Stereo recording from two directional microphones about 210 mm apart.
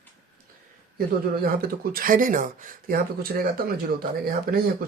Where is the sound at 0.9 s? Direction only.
45° right (ahead or behind).